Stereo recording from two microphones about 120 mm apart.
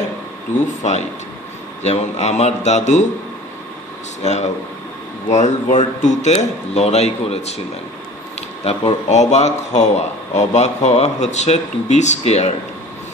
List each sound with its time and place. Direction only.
0.5 s speech: 80° left
1.8 s speech: 65° left (ahead or behind)
4.2 s speech: 70° left (ahead or behind)
5.3 s speech: 80° left